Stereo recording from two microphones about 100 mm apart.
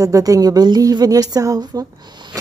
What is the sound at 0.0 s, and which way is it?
A woman's voice, 35° right (ahead or behind).